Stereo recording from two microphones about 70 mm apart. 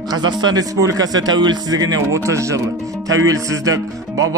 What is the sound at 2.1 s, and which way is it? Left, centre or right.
Speech, right.